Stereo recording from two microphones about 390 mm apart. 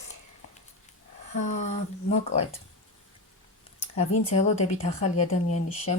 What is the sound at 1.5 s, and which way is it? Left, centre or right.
Speech, centre.